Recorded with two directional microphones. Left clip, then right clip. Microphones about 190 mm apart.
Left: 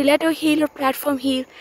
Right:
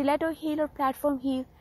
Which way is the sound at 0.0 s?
25° left (ahead or behind).